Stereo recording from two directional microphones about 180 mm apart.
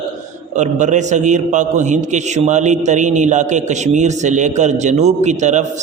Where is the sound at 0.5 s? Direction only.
40° right (ahead or behind).